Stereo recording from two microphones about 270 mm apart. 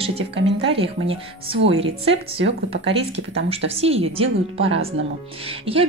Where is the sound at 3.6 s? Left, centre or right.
Right.